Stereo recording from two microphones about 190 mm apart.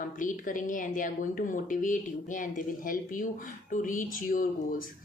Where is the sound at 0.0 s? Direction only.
45° left (ahead or behind).